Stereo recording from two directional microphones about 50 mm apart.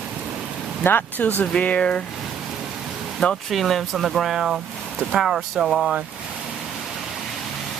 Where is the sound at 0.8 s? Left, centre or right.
Left.